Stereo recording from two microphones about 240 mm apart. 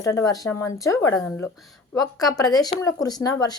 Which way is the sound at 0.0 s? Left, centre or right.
Centre.